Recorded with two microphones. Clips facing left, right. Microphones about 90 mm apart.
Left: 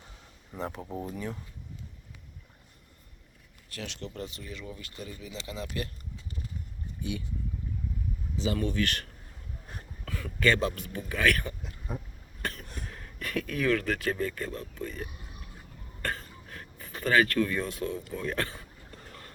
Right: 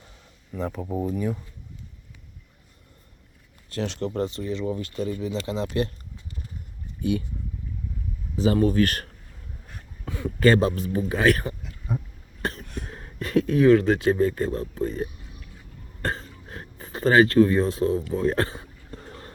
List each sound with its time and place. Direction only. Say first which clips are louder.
0.6 s speech: right 6 dB; centre (ahead or behind)
1.1 s speech: right 9 dB; 10° right (ahead or behind)
3.7 s speech: right 11 dB; 35° right (ahead or behind)
8.5 s speech: right 10 dB; 40° right (ahead or behind)
10.1 s a sound: right 8 dB; 25° right (ahead or behind)
10.4 s speech: right 7 dB; 35° right (ahead or behind)
11.6 s a sound: right 7 dB; centre (ahead or behind)
12.4 s cough: right 6 dB; 35° right (ahead or behind)
12.7 s speech: right 6 dB; 35° right (ahead or behind)
16.0 s throat clearing: right 5 dB; 30° right (ahead or behind)